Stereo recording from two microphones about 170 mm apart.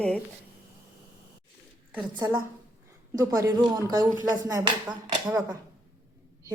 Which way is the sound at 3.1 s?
20° right (ahead or behind).